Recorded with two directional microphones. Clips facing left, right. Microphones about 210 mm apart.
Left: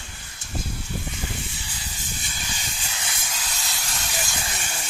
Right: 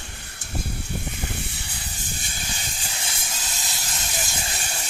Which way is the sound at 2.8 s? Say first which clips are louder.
Even; 30° right (ahead or behind).